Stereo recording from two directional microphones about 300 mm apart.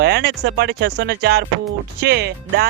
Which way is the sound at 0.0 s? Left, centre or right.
Right.